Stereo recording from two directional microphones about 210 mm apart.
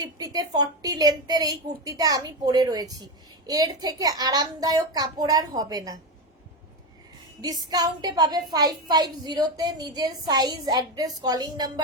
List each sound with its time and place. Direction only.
0.0 s a woman's voice: 15° right (ahead or behind)
7.4 s a woman's voice: 20° right (ahead or behind)